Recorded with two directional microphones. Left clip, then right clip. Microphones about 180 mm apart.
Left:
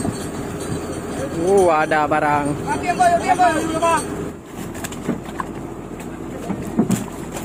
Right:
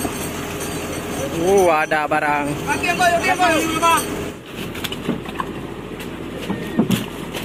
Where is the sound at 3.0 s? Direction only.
65° left (ahead or behind).